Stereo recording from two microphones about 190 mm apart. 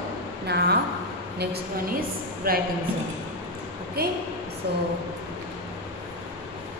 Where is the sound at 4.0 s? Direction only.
55° right (ahead or behind).